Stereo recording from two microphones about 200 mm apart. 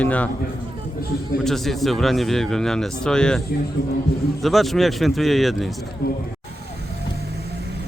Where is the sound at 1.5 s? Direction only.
Centre (ahead or behind).